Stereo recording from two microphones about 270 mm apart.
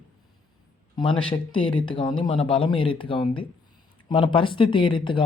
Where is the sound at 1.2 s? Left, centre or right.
Centre.